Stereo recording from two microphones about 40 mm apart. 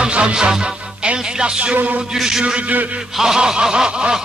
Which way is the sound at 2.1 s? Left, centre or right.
Centre.